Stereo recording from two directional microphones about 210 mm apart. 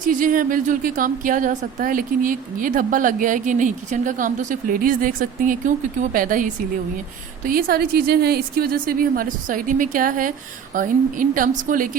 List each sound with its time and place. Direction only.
0.0 s a woman's voice: 40° right (ahead or behind)